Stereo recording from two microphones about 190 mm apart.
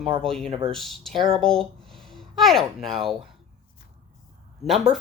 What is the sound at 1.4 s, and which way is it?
Speech, centre (ahead or behind).